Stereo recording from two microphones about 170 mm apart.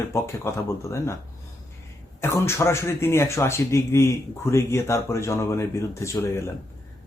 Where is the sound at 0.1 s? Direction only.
15° left (ahead or behind).